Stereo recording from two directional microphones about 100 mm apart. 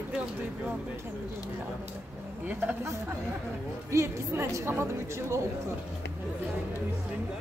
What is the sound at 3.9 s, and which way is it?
A woman's voice, 30° right (ahead or behind).